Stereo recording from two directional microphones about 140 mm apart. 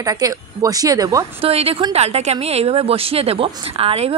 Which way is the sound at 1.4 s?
45° right (ahead or behind).